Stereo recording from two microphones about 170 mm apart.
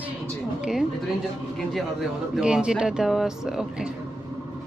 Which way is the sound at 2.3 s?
5° right (ahead or behind).